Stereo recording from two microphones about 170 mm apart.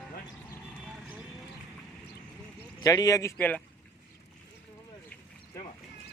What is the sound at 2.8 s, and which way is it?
Speech, 20° left (ahead or behind).